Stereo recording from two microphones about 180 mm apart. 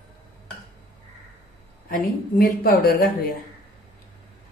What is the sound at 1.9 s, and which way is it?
A woman's voice, 55° left (ahead or behind).